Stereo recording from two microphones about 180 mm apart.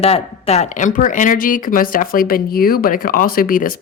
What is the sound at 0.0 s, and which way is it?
Speech, 35° left (ahead or behind).